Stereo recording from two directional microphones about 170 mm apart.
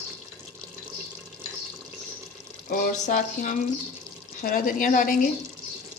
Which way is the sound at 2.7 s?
50° left (ahead or behind).